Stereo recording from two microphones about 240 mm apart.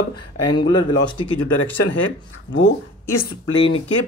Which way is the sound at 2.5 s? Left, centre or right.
Left.